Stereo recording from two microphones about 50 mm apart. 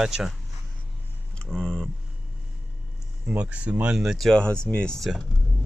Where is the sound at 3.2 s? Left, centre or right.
Right.